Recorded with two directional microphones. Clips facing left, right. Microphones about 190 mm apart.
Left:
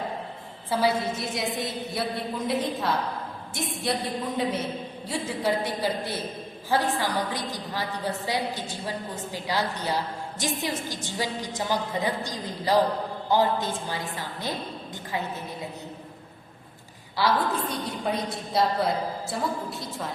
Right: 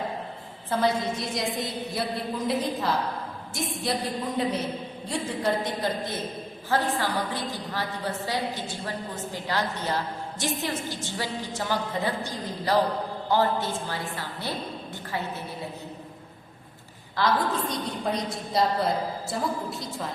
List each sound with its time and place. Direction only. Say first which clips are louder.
0.7 s a woman's voice: even; 10° left (ahead or behind)
17.2 s a woman's voice: even; 10° left (ahead or behind)